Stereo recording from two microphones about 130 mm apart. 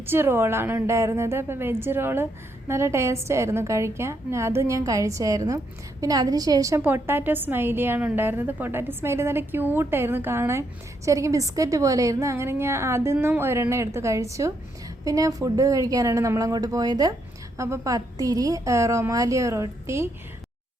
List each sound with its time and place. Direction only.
0.0 s a woman's voice: 15° right (ahead or behind)